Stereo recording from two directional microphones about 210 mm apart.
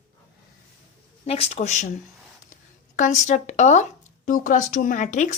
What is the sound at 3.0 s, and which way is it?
Speech, 35° left (ahead or behind).